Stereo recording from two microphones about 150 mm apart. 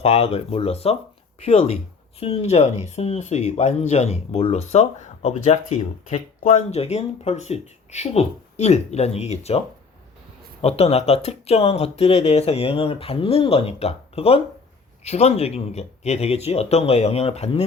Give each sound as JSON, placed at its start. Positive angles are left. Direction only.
{"t": 0.0, "sound": "speech", "side_deg": 45}